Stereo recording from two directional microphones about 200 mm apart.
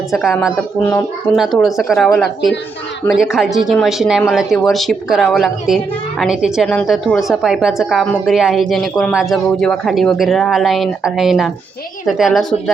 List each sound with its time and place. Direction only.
0.1 s speech: centre (ahead or behind)